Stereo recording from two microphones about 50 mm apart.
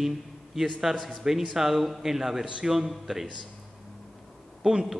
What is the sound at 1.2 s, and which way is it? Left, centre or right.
A man's voice, centre.